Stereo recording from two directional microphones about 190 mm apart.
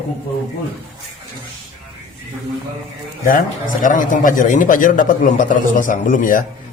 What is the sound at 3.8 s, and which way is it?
A man's voice, 45° left (ahead or behind).